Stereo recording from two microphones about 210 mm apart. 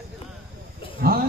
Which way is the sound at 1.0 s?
45° right (ahead or behind).